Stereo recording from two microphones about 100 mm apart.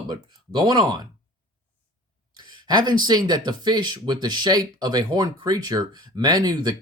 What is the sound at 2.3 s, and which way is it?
Speech, 45° right (ahead or behind).